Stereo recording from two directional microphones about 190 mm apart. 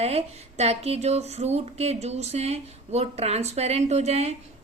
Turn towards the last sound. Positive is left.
turn(degrees=-35)  # may be behind; listen again after turning